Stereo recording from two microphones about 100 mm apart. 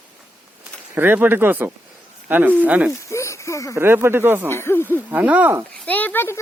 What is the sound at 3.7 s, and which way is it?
Speech, 25° right (ahead or behind).